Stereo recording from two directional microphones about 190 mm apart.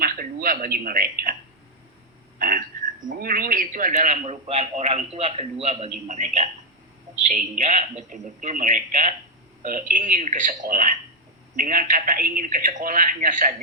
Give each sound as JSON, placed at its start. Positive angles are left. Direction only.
{"t": 0.0, "sound": "speech", "side_deg": -50}
{"t": 2.4, "sound": "a man's voice", "side_deg": -45}
{"t": 7.5, "sound": "a man's voice", "side_deg": -40}